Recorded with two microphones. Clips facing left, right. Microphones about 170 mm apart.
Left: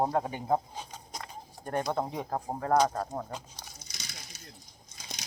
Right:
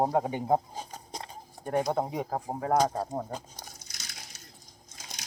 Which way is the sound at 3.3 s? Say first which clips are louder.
Right 2 dB; 45° right (ahead or behind).